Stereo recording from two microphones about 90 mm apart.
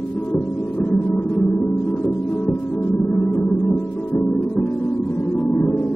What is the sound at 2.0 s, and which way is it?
Music, 15° left (ahead or behind).